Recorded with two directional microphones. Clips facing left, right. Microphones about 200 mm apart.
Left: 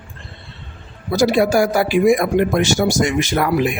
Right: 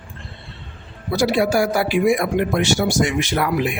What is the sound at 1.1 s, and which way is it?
Speech, 45° left (ahead or behind).